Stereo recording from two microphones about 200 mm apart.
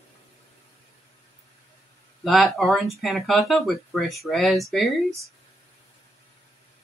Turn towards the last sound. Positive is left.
turn(degrees=0)  # may be behind; listen again after turning